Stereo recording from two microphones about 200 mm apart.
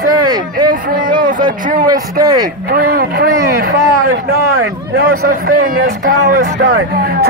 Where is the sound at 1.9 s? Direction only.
20° right (ahead or behind).